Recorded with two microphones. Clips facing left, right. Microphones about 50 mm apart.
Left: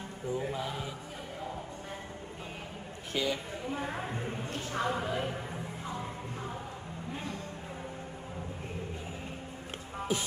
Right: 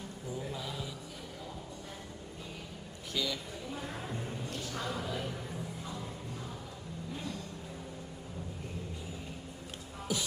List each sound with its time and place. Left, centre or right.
0.3 s chant: left
3.1 s a sound: left
7.1 s vehicle: left
10.0 s music: left